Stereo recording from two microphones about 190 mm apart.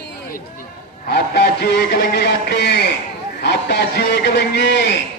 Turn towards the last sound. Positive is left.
turn(degrees=65)  # may be behind; listen again after turning